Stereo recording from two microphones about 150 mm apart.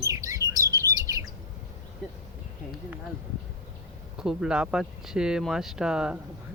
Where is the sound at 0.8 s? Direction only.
20° right (ahead or behind).